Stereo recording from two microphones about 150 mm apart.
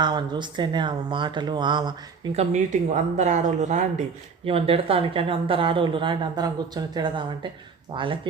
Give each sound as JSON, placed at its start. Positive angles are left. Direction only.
{"t": 0.0, "sound": "speech", "side_deg": -30}
{"t": 2.3, "sound": "speech", "side_deg": -50}
{"t": 4.4, "sound": "speech", "side_deg": -40}